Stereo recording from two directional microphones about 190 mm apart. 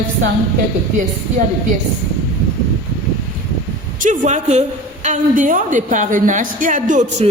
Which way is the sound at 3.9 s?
40° right (ahead or behind).